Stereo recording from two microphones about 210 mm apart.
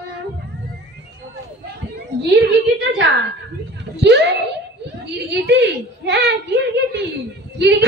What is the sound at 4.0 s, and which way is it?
Speech, 55° right (ahead or behind).